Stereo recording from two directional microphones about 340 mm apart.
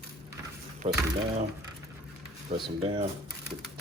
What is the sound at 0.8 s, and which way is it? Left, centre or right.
Speech, centre.